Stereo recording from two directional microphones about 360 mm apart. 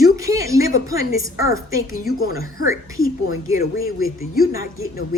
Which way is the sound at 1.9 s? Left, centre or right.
Left.